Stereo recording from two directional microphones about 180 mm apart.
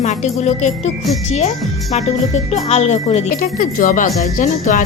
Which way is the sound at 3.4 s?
50° left (ahead or behind).